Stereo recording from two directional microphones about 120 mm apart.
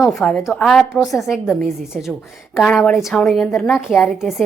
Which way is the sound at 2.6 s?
10° left (ahead or behind).